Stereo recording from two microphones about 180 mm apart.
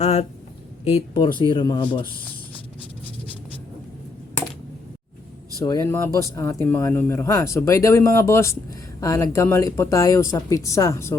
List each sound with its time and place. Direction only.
0.0 s speech: 35° left (ahead or behind)
5.6 s speech: 20° left (ahead or behind)